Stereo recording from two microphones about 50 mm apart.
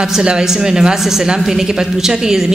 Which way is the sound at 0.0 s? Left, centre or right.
Centre.